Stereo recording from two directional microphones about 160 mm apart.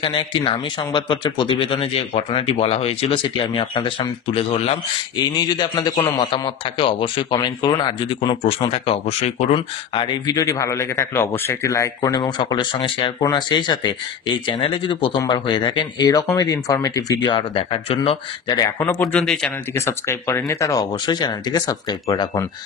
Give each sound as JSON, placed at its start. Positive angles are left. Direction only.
{"t": 0.0, "sound": "speech", "side_deg": 30}
{"t": 5.1, "sound": "speech", "side_deg": 25}
{"t": 18.6, "sound": "speech", "side_deg": 15}
{"t": 19.1, "sound": "a man's voice", "side_deg": 5}
{"t": 19.7, "sound": "speech", "side_deg": 15}